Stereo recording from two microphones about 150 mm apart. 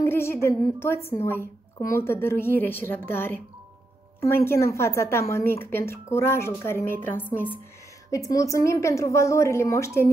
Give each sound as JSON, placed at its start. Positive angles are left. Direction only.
{"t": 0.0, "sound": "a woman's voice", "side_deg": 15}
{"t": 4.5, "sound": "a woman's voice", "side_deg": 20}